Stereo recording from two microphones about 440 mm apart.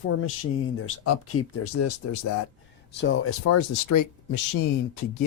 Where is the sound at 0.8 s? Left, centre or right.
Left.